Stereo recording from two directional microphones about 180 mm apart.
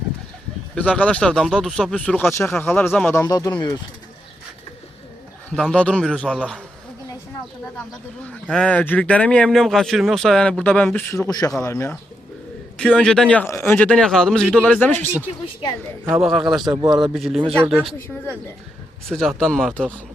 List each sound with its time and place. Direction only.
0.8 s speech: 5° left (ahead or behind)
3.2 s speech: 20° left (ahead or behind)
5.5 s speech: 5° left (ahead or behind)
8.3 s speech: 5° left (ahead or behind)
16.2 s speech: centre (ahead or behind)
16.6 s a man's voice: 20° right (ahead or behind)
17.2 s speech: 5° right (ahead or behind)
19.0 s speech: 5° left (ahead or behind)